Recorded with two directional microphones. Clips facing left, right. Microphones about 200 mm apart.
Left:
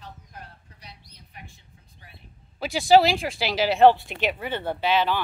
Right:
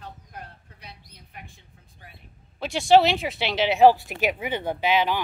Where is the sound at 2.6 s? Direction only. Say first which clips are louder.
Even; centre (ahead or behind).